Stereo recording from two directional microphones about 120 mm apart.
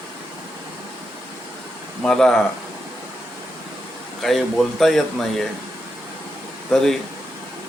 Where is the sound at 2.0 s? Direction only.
5° left (ahead or behind).